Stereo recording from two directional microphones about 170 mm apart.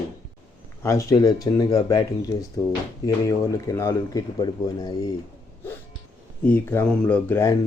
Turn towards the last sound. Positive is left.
turn(degrees=15)  # may be behind; listen again after turning